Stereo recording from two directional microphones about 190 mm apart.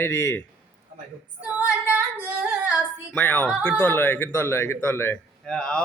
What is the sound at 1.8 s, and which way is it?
Singing, 10° right (ahead or behind).